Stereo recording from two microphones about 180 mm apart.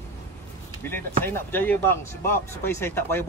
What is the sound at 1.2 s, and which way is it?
Speech, 10° left (ahead or behind).